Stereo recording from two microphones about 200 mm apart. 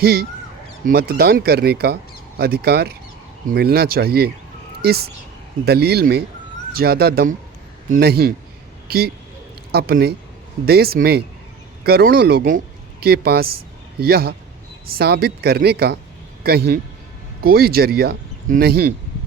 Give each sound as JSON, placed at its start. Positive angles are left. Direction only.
{"t": 0.0, "sound": "speech", "side_deg": -50}